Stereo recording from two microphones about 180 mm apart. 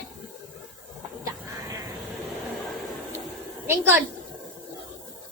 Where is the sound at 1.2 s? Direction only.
15° right (ahead or behind).